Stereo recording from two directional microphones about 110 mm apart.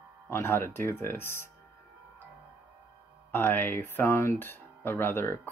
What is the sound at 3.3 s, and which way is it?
Speech, 20° left (ahead or behind).